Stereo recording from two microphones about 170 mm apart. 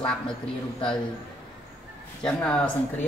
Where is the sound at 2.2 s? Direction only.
5° left (ahead or behind).